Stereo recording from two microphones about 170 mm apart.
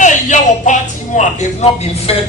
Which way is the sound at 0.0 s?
45° left (ahead or behind).